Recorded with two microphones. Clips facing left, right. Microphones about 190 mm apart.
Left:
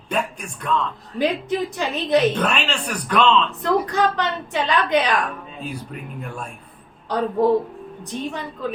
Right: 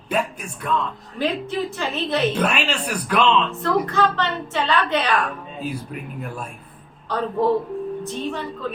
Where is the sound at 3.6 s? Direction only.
15° left (ahead or behind).